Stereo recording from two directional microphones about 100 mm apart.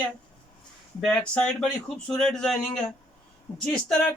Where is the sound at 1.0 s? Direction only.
5° left (ahead or behind).